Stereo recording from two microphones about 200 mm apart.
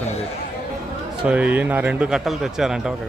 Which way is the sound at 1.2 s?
5° right (ahead or behind).